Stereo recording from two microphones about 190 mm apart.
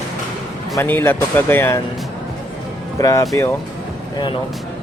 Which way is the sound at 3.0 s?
20° left (ahead or behind).